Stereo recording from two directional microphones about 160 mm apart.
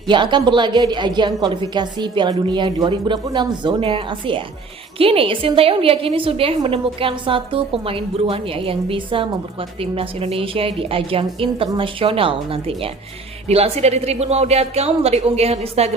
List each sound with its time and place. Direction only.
0.1 s a woman's voice: 30° right (ahead or behind)